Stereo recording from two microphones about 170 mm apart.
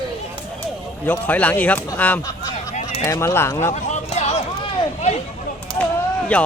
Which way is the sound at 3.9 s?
45° left (ahead or behind).